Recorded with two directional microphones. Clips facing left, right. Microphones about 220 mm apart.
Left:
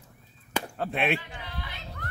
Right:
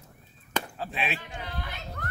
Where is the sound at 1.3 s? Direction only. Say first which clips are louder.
Right 3 dB; 45° right (ahead or behind).